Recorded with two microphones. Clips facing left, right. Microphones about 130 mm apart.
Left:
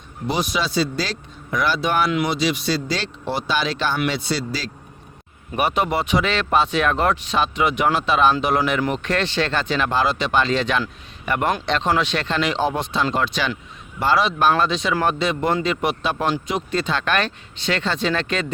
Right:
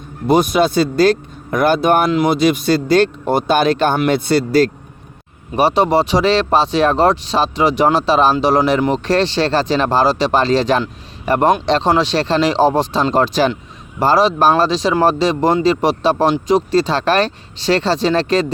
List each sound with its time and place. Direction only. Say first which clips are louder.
0.3 s speech: right 10 dB; 50° right (ahead or behind)
2.0 s speech: right 7 dB; 35° right (ahead or behind)
2.3 s speech: right 8 dB; 50° right (ahead or behind)
5.5 s speech: right 7 dB; 35° right (ahead or behind)